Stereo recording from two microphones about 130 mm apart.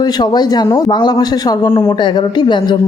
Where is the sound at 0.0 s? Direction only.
30° left (ahead or behind).